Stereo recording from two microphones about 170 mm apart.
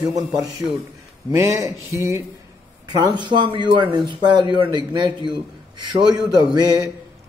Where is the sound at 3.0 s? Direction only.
25° right (ahead or behind).